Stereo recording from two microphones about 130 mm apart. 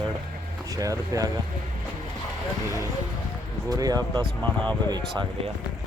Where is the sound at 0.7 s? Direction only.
25° right (ahead or behind).